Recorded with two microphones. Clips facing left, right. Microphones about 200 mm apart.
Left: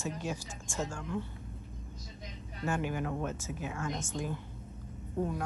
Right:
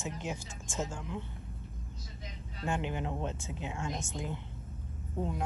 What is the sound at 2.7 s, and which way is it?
A woman's voice, 20° right (ahead or behind).